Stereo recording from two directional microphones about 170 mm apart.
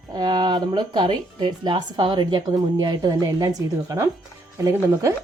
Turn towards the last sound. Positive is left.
turn(degrees=-15)  # may be behind; listen again after turning